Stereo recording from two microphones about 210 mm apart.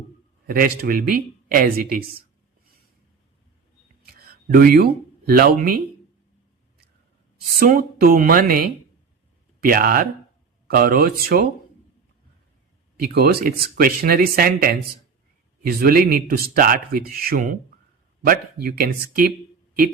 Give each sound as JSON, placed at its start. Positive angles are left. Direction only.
{"t": 0.4, "sound": "speech", "side_deg": -45}
{"t": 4.0, "sound": "speech", "side_deg": -45}
{"t": 7.6, "sound": "speech", "side_deg": -40}
{"t": 13.0, "sound": "speech", "side_deg": -45}